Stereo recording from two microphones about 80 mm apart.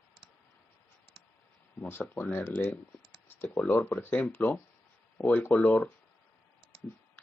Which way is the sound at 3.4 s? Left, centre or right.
Centre.